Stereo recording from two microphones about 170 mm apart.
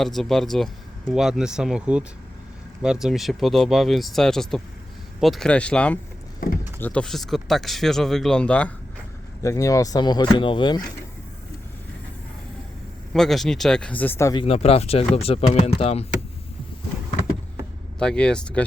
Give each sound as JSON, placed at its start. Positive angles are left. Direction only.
{"t": 0.0, "sound": "speech", "side_deg": 0}
{"t": 9.4, "sound": "speech", "side_deg": 20}
{"t": 13.1, "sound": "speech", "side_deg": 0}
{"t": 14.3, "sound": "speech", "side_deg": 35}
{"t": 18.0, "sound": "speech", "side_deg": 5}